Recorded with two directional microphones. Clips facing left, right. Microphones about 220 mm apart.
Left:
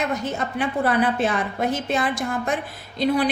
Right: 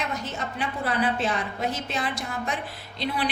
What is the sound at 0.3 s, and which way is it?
A woman's voice, 55° left (ahead or behind).